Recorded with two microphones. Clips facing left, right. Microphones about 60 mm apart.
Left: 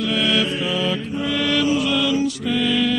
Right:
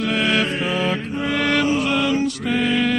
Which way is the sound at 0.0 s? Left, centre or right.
Right.